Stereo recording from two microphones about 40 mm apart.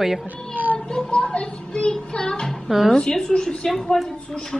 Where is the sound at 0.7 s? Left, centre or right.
Centre.